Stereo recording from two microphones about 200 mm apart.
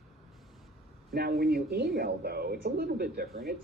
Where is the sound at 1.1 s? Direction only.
50° right (ahead or behind).